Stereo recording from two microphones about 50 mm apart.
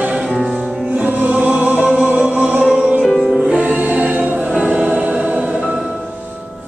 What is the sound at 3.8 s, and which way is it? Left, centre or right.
Choir, right.